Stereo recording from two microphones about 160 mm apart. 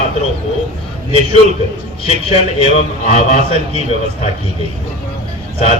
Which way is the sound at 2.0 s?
35° left (ahead or behind).